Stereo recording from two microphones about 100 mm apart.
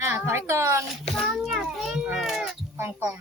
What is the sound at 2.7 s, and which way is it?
Speech, 25° right (ahead or behind).